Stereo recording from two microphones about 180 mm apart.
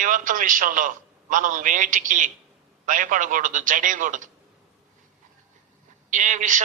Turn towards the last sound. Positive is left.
turn(degrees=-45)  # may be behind; listen again after turning